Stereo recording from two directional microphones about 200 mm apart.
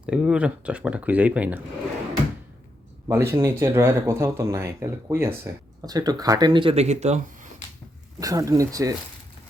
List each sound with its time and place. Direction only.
0.0 s speech: 5° right (ahead or behind)
3.1 s speech: 15° right (ahead or behind); by 7.2 s 35° right (ahead or behind)
8.2 s speech: 15° right (ahead or behind)